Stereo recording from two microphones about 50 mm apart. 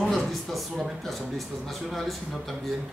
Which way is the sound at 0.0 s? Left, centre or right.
Centre.